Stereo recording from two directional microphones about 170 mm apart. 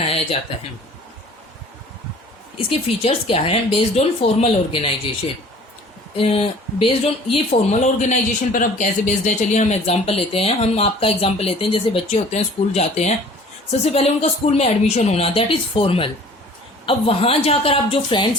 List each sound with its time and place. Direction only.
0.0 s a sound: 35° left (ahead or behind)
2.6 s speech: 35° left (ahead or behind)
6.1 s speech: 35° left (ahead or behind)